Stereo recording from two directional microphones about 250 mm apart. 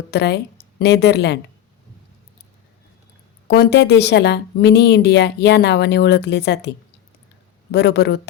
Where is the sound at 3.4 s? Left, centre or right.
Left.